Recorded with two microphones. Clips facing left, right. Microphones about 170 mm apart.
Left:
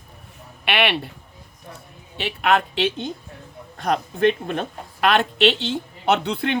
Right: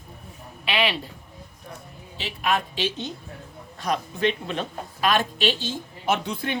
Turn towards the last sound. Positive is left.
turn(degrees=70)  # may be behind; listen again after turning